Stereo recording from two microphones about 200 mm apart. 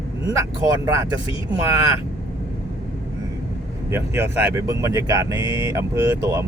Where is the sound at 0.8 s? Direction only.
15° right (ahead or behind).